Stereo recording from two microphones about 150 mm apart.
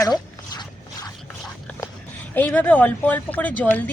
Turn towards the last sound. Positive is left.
turn(degrees=10)  # may be behind; listen again after turning